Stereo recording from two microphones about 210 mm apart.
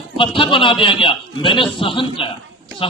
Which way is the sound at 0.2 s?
25° left (ahead or behind).